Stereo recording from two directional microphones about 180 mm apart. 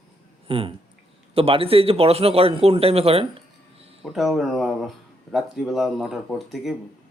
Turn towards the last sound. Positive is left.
turn(degrees=0)  # may be behind; listen again after turning